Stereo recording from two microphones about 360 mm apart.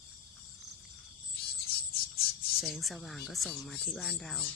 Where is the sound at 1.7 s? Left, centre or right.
Left.